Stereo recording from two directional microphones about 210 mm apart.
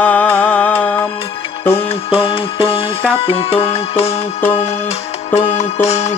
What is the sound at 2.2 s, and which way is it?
Music, 25° left (ahead or behind).